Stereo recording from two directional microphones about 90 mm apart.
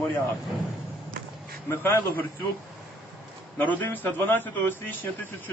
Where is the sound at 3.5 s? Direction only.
20° left (ahead or behind).